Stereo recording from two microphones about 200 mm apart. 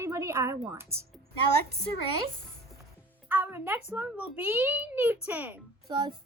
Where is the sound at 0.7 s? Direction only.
15° right (ahead or behind).